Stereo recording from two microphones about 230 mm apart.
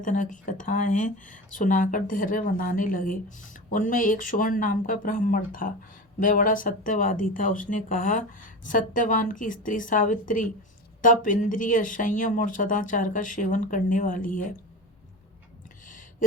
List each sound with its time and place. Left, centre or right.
0.0 s speech: left